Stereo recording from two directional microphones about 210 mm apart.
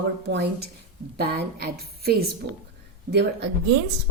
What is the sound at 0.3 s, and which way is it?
A woman's voice, 50° right (ahead or behind).